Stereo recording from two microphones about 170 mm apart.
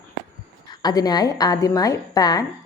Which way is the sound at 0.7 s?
25° left (ahead or behind).